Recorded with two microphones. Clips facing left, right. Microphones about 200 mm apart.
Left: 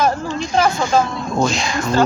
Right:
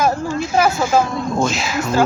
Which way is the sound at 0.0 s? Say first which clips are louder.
Right 1 dB; 5° right (ahead or behind).